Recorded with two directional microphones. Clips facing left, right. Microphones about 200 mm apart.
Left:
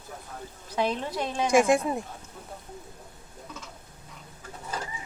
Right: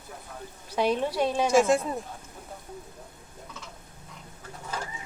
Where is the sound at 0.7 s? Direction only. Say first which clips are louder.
Right 3 dB; 10° right (ahead or behind).